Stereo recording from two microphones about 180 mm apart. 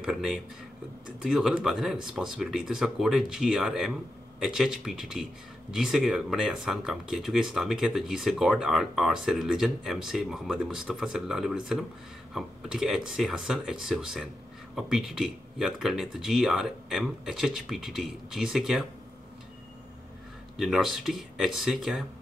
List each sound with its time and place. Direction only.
0.0 s speech: centre (ahead or behind)
20.5 s speech: centre (ahead or behind)